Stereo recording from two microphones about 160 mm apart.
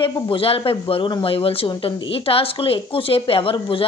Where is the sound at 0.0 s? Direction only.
35° left (ahead or behind).